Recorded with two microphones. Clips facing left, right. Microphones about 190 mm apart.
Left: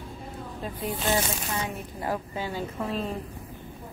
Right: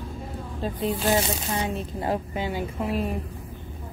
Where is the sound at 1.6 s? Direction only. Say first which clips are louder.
Right 4 dB; 25° right (ahead or behind).